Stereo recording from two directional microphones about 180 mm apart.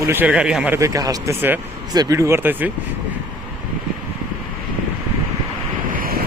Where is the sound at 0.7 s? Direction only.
20° right (ahead or behind).